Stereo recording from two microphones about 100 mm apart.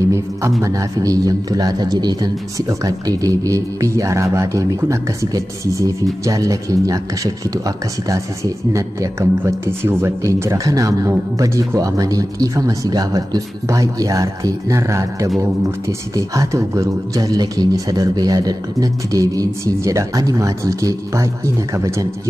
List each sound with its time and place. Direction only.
0.1 s speech: 30° right (ahead or behind)
9.4 s speech: 25° right (ahead or behind)